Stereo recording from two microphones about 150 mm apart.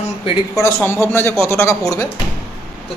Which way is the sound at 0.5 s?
20° left (ahead or behind).